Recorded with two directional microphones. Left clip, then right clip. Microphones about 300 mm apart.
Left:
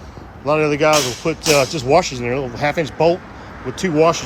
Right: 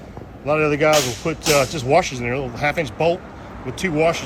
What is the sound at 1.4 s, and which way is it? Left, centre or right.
Speech, left.